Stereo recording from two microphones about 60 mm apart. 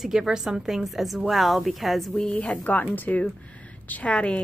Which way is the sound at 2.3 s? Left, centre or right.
Left.